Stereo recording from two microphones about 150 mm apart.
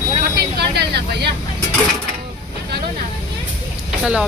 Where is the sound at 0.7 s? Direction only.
90° right.